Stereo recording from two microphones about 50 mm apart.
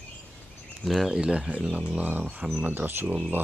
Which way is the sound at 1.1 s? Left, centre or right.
Centre.